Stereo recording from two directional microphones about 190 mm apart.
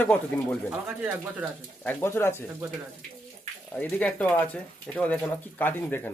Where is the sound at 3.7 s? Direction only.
10° left (ahead or behind).